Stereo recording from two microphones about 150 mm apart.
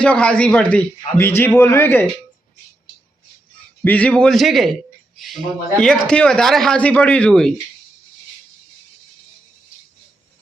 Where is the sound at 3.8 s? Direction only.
10° left (ahead or behind).